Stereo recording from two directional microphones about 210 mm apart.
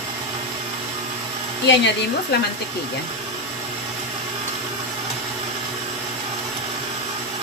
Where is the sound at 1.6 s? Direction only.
55° left (ahead or behind).